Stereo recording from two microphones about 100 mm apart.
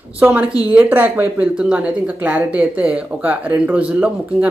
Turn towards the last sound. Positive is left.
turn(degrees=-15)  # may be behind; listen again after turning